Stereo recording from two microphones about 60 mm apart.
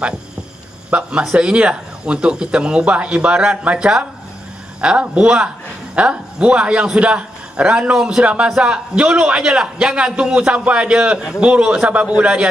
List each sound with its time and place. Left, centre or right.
0.8 s a man's voice: right
7.9 s a man's voice: centre